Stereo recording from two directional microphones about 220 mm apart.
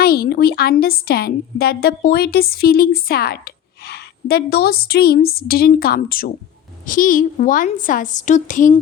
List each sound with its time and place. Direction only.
0.0 s a woman's voice: 45° left (ahead or behind)